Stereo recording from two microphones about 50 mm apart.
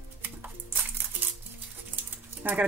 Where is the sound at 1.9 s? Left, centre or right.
Right.